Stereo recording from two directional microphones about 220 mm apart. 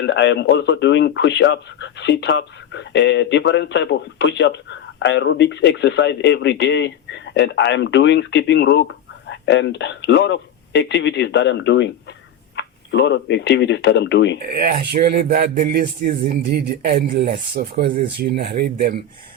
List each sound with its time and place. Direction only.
0.0 s speech: 55° left (ahead or behind)
14.5 s speech: 40° right (ahead or behind)